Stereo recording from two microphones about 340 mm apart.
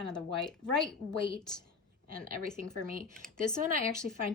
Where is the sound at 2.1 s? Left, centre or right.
Right.